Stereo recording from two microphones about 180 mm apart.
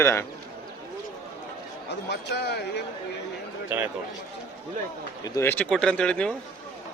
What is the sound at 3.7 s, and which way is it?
Speech, 10° right (ahead or behind).